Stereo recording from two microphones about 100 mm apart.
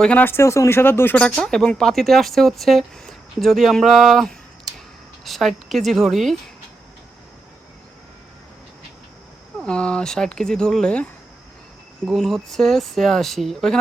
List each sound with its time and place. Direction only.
0.0 s speech: 10° left (ahead or behind)
0.3 s speech: 25° left (ahead or behind)
1.2 s speech: 5° left (ahead or behind)
9.6 s speech: 10° left (ahead or behind)
12.1 s speech: 5° left (ahead or behind)